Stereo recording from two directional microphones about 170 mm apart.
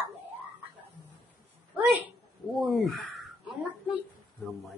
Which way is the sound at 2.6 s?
Centre (ahead or behind).